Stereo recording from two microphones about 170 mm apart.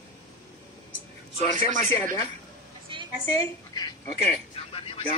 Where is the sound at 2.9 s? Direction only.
30° right (ahead or behind).